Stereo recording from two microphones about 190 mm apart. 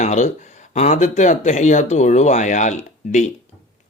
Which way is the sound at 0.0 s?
40° left (ahead or behind).